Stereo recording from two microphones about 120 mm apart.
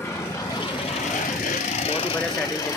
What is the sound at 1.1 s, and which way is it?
Vehicle, 80° left.